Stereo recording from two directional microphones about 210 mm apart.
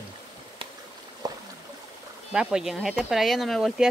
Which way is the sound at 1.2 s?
20° right (ahead or behind).